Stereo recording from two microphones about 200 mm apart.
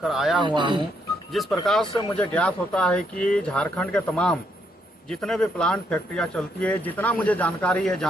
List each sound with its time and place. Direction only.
0.0 s speech: centre (ahead or behind)
0.4 s speech: 25° right (ahead or behind)
1.3 s speech: centre (ahead or behind)